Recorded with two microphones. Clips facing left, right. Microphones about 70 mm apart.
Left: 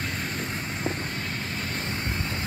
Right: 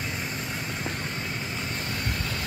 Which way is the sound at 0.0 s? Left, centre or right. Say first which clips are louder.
Left 1 dB; left.